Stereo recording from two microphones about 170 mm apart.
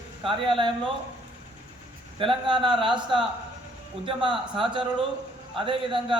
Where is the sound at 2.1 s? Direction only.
30° right (ahead or behind).